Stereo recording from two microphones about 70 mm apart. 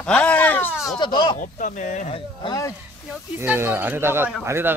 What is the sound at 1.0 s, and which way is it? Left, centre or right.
Speech, left.